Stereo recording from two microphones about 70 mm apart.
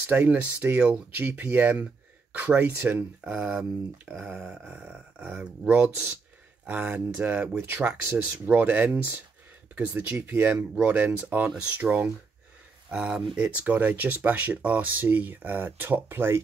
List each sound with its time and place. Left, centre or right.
0.1 s speech: right
4.0 s speech: right
13.4 s speech: right